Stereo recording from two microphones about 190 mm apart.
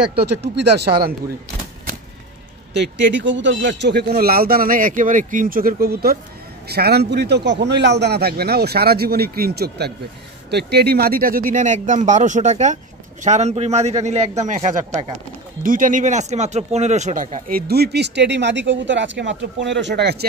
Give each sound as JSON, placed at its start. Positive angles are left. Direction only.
{"t": 0.2, "sound": "speech", "side_deg": -60}
{"t": 2.7, "sound": "speech", "side_deg": -70}